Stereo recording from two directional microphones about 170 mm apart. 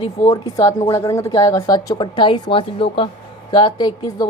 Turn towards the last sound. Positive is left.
turn(degrees=25)  # may be behind; listen again after turning